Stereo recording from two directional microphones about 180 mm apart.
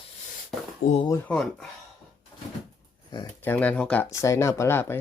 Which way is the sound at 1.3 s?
5° left (ahead or behind).